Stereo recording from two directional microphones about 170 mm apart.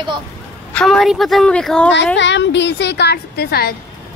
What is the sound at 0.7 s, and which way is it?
Speech, centre (ahead or behind).